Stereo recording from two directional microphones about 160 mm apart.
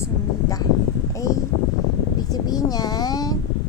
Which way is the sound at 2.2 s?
25° left (ahead or behind).